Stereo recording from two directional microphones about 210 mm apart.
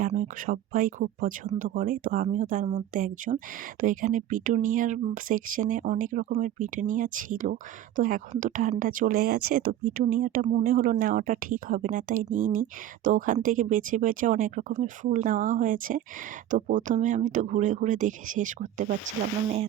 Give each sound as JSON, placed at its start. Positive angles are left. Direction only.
{"t": 0.0, "sound": "speech", "side_deg": -40}